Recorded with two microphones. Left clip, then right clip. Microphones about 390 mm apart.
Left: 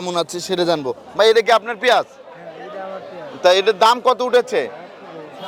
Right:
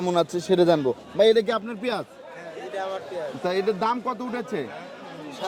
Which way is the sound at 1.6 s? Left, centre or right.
Left.